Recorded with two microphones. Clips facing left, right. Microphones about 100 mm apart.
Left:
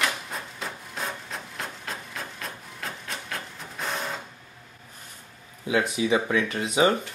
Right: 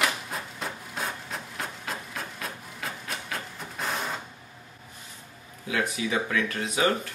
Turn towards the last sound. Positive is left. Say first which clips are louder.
# left 3 dB
turn(degrees=20)  # may be behind; listen again after turning